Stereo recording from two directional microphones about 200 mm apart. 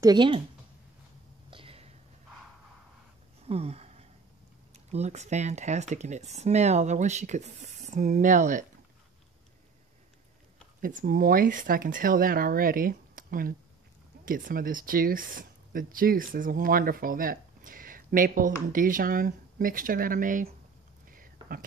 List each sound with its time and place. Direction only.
0.0 s speech: 20° right (ahead or behind)
1.5 s whispering: 30° right (ahead or behind)
3.4 s a sound: 30° right (ahead or behind)
4.7 s speech: 35° right (ahead or behind)
10.8 s speech: 40° right (ahead or behind)
21.1 s a sound: 45° right (ahead or behind)